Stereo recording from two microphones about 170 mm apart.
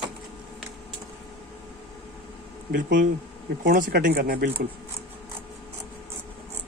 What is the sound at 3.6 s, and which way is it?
Speech, 55° right (ahead or behind).